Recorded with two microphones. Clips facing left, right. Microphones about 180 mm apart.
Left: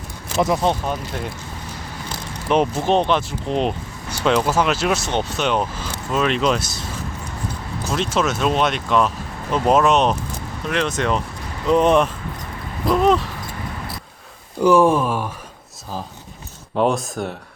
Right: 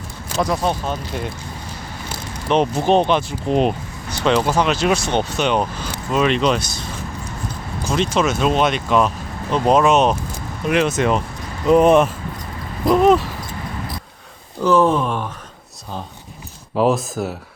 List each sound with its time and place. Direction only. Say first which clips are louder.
0.4 s speech: left 1 dB; 20° left (ahead or behind)
2.5 s speech: right 2 dB; 5° left (ahead or behind)
4.1 s vehicle: right 1 dB; 5° left (ahead or behind)
4.4 s speech: right 1 dB; 5° left (ahead or behind)
7.9 s speech: right 2 dB; centre (ahead or behind)
14.6 s speech: left 1 dB; 10° left (ahead or behind)
16.7 s speech: right 2 dB; centre (ahead or behind)